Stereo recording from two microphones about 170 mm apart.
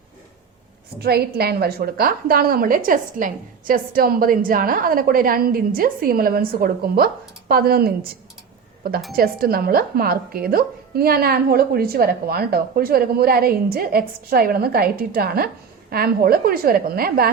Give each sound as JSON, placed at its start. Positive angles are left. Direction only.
{"t": 0.9, "sound": "a woman's voice", "side_deg": -70}
{"t": 9.1, "sound": "a woman's voice", "side_deg": -60}